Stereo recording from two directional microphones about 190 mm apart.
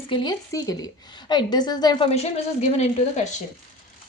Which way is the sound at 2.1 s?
35° left (ahead or behind).